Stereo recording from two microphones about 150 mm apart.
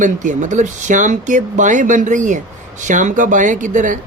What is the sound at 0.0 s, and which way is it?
Speech, 55° right (ahead or behind).